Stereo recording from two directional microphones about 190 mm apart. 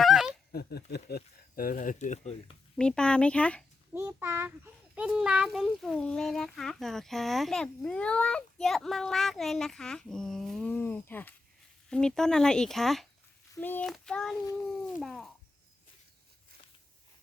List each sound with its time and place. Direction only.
0.0 s a sound: centre (ahead or behind)
0.5 s speech: 55° left (ahead or behind); by 2.6 s 35° left (ahead or behind)
2.7 s a child's voice: 5° left (ahead or behind)
3.9 s a child's voice: 15° right (ahead or behind)